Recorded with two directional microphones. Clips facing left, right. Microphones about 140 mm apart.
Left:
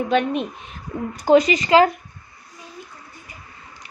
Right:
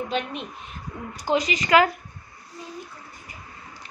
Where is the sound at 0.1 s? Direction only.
55° left (ahead or behind).